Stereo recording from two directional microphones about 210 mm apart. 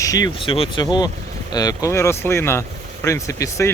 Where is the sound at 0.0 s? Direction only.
15° left (ahead or behind).